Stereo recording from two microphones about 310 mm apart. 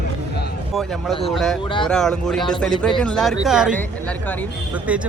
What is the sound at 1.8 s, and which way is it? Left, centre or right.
Speech, centre.